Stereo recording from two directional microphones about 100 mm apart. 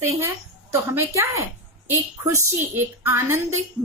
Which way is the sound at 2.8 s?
25° right (ahead or behind).